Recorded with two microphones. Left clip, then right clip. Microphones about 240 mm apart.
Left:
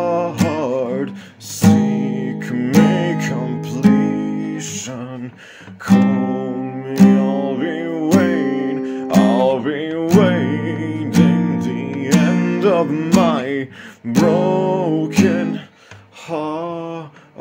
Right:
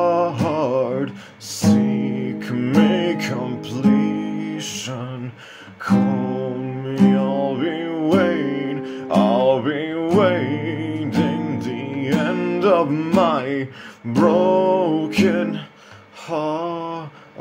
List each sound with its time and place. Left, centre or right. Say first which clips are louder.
0.0 s music: even; left
7.1 s music: left 2 dB; left
16.3 s mantra: even; left